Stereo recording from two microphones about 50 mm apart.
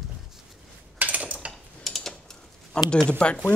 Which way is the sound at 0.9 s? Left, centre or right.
Right.